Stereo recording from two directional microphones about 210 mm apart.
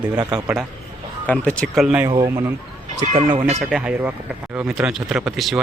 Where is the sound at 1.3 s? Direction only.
5° left (ahead or behind).